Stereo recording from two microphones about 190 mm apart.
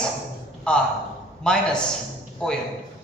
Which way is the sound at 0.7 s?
5° left (ahead or behind).